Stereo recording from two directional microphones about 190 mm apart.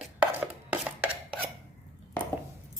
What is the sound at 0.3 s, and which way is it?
Dishes, 10° right (ahead or behind).